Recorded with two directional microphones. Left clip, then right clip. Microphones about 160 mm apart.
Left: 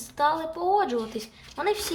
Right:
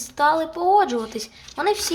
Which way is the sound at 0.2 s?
20° right (ahead or behind).